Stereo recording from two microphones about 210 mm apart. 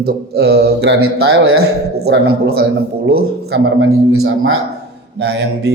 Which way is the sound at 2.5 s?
50° right (ahead or behind).